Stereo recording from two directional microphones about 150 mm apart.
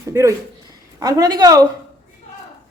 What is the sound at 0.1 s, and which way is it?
A woman's voice, 20° right (ahead or behind).